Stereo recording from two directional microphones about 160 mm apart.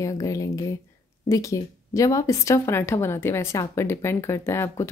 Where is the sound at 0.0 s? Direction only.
20° left (ahead or behind).